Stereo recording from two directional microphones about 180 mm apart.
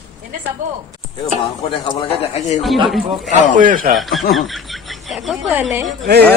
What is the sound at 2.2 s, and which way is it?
Speech, 35° left (ahead or behind).